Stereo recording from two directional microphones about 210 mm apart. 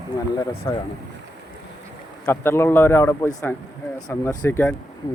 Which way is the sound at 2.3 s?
10° left (ahead or behind).